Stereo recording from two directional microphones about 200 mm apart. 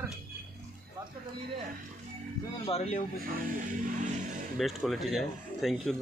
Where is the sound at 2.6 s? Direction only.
30° left (ahead or behind).